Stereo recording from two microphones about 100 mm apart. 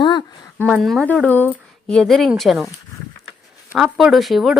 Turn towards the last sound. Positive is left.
turn(degrees=0)  # may be behind; listen again after turning